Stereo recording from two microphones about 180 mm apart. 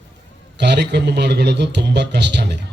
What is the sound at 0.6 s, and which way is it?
A man's voice, 70° right (ahead or behind).